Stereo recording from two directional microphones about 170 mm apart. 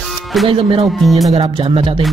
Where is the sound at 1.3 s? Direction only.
30° right (ahead or behind).